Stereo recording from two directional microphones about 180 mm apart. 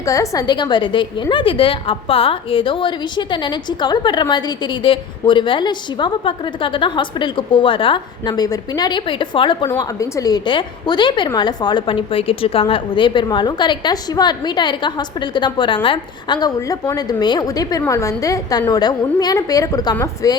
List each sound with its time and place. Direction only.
0.0 s a woman's voice: 20° left (ahead or behind)